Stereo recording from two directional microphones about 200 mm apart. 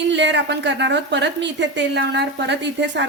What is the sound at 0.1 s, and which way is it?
A woman's voice, 60° right (ahead or behind).